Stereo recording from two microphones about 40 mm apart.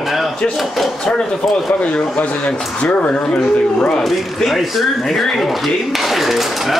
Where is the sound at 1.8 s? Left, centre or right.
Left.